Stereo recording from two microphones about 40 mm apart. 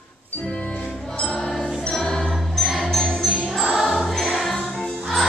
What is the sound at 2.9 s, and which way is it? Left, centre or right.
Jingle bell, centre.